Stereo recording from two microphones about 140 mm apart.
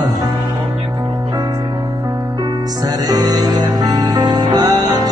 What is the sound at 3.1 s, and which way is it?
Music, 25° right (ahead or behind).